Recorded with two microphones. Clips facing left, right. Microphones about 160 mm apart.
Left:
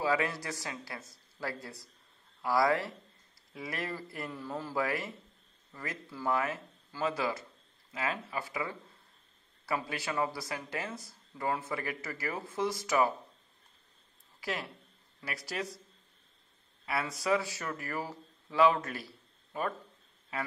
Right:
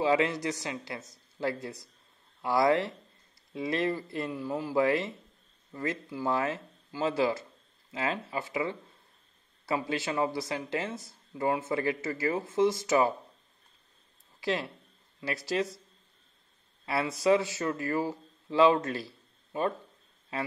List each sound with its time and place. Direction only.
0.0 s speech: 20° right (ahead or behind)
14.4 s speech: 25° right (ahead or behind)
16.8 s speech: 25° right (ahead or behind)